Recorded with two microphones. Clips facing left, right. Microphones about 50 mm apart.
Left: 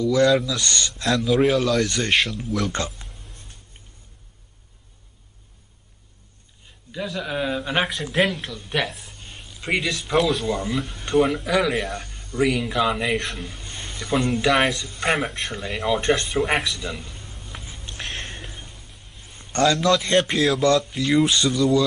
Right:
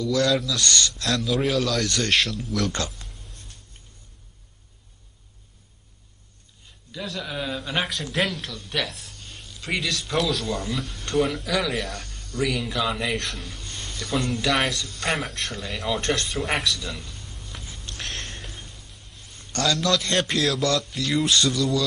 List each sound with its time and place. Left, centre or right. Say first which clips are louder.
0.0 s speech: left 4 dB; centre
1.4 s speech: left 4 dB; centre
2.7 s a sound: left 2 dB; left
7.1 s a man's voice: left 4 dB; centre
14.5 s speech: left 4 dB; centre
14.8 s speech: left 4 dB; left
16.0 s speech: left 5 dB; centre
17.0 s a sound: left 2 dB; left
20.0 s speech: left 4 dB; centre